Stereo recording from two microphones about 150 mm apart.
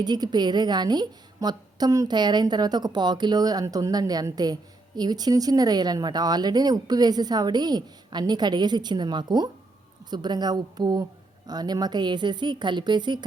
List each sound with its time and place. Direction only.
0.0 s a woman's voice: 30° right (ahead or behind)